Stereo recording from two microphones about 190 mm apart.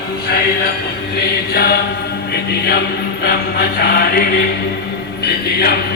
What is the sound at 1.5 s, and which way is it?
Mantra, 55° left (ahead or behind).